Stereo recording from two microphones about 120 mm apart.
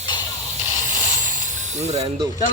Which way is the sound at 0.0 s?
40° left (ahead or behind).